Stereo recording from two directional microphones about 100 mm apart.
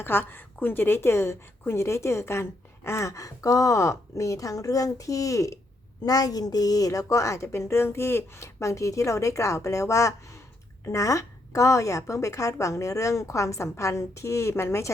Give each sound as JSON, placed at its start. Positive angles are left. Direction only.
{"t": 0.0, "sound": "a woman's voice", "side_deg": 20}